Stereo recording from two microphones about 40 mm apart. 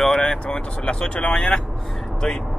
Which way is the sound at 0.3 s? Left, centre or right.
Left.